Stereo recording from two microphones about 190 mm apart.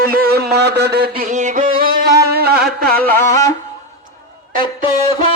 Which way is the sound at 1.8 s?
50° right (ahead or behind).